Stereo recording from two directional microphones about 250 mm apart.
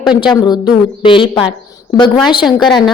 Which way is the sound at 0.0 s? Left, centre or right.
Centre.